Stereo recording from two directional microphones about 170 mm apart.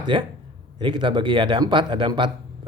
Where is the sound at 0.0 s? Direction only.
30° right (ahead or behind).